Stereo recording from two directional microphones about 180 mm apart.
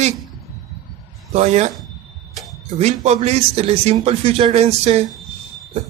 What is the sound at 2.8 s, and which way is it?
Speech, 40° right (ahead or behind).